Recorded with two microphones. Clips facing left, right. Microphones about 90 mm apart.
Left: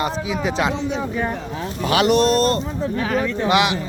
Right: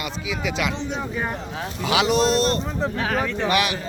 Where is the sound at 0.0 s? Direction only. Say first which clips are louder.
Left 6 dB; 35° left (ahead or behind).